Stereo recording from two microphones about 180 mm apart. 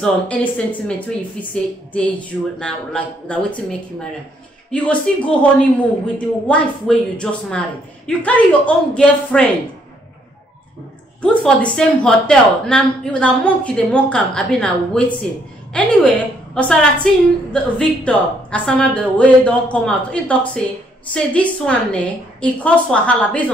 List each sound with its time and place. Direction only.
0.0 s a woman's voice: 5° left (ahead or behind)
4.6 s a woman's voice: 5° left (ahead or behind)
11.1 s a woman's voice: 5° left (ahead or behind)